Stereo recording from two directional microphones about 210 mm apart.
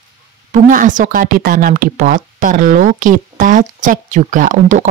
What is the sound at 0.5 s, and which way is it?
Speech, 40° right (ahead or behind).